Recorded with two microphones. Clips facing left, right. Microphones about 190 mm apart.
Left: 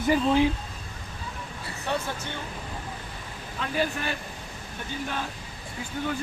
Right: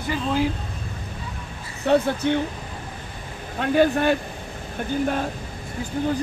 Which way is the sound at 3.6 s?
60° right (ahead or behind).